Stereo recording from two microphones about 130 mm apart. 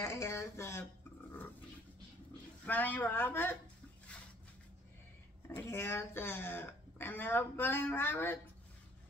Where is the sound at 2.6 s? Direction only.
15° left (ahead or behind).